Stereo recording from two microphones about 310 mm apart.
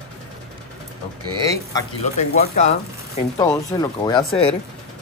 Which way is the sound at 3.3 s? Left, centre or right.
Centre.